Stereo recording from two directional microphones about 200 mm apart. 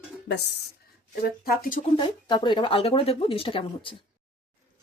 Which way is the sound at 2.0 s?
25° left (ahead or behind).